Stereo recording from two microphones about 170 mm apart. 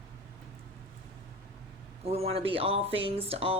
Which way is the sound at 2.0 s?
35° right (ahead or behind).